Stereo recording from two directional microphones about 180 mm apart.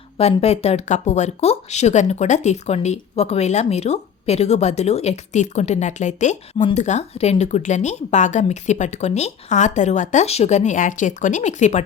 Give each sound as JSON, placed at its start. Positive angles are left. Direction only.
{"t": 0.2, "sound": "speech", "side_deg": 35}